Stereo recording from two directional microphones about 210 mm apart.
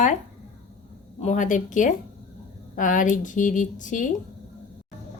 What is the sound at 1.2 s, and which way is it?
A woman's voice, 35° left (ahead or behind).